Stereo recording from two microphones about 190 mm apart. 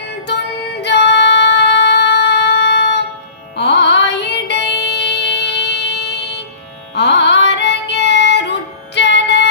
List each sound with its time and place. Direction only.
0.8 s music: 65° left (ahead or behind)